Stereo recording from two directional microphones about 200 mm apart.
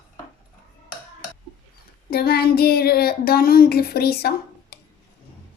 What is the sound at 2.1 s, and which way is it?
Speech, 50° left (ahead or behind).